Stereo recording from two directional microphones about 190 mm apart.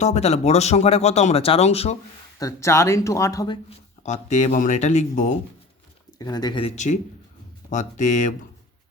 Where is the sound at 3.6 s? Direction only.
35° left (ahead or behind).